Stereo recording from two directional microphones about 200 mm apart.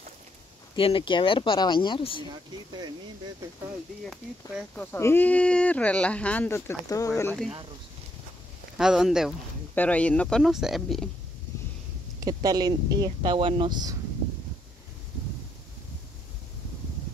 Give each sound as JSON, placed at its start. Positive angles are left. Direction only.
{"t": 0.7, "sound": "speech", "side_deg": 25}
{"t": 4.0, "sound": "speech", "side_deg": 0}
{"t": 8.7, "sound": "speech", "side_deg": 0}
{"t": 12.2, "sound": "speech", "side_deg": -20}